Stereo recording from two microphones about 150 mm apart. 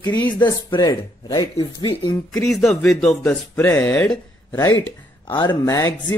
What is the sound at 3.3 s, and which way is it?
Speech, 15° left (ahead or behind).